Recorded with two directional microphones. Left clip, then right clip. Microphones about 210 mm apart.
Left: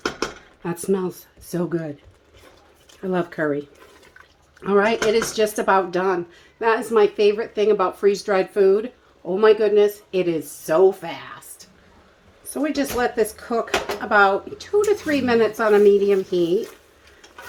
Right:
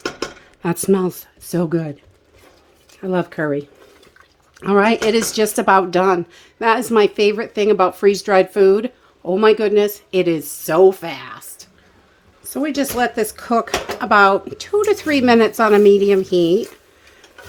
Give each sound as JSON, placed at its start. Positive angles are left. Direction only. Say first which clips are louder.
{"t": 0.6, "sound": "speech", "louder": "right 6 dB", "side_deg": -55}
{"t": 3.0, "sound": "speech", "louder": "right 3 dB", "side_deg": -45}
{"t": 4.6, "sound": "speech", "louder": "right 3 dB", "side_deg": -50}
{"t": 12.6, "sound": "speech", "louder": "right 3 dB", "side_deg": -55}